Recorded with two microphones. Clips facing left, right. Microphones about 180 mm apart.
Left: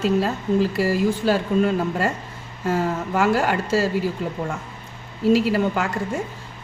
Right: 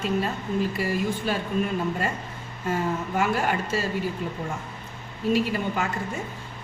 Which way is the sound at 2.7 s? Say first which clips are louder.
Left 4 dB; 75° left (ahead or behind).